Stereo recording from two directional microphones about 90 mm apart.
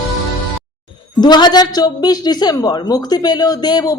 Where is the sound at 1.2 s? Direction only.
55° left (ahead or behind).